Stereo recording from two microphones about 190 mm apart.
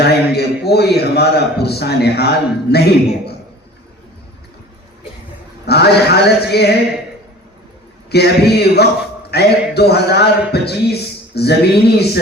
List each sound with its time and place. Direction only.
0.0 s a man's voice: 60° left (ahead or behind)
5.6 s a man's voice: 60° left (ahead or behind)
8.1 s a man's voice: 60° left (ahead or behind)